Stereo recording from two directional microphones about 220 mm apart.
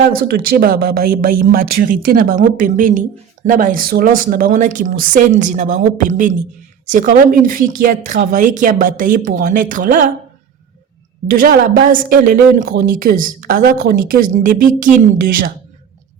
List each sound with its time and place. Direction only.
0.0 s a woman's voice: 45° right (ahead or behind)
11.3 s a woman's voice: 40° right (ahead or behind)